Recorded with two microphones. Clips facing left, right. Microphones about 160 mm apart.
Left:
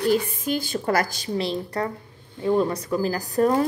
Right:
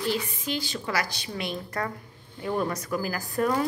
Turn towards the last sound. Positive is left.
turn(degrees=35)  # may be behind; listen again after turning